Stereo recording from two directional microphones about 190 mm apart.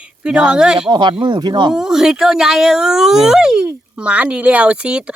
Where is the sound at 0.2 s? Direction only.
5° right (ahead or behind).